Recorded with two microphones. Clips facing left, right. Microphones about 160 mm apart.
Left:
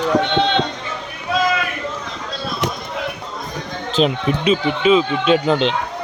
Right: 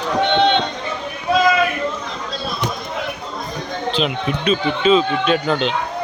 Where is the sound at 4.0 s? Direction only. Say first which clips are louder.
Left 6 dB; 35° left (ahead or behind).